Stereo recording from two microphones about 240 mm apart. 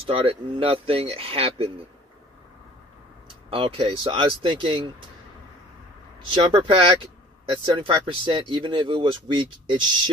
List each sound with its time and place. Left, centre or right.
0.0 s speech: right
3.4 s speech: right
6.3 s speech: centre